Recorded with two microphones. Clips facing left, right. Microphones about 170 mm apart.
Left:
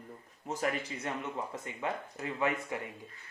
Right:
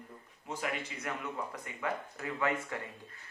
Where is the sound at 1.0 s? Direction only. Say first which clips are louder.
Left 2 dB; 25° left (ahead or behind).